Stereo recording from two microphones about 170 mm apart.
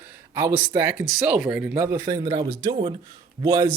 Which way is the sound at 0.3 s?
15° right (ahead or behind).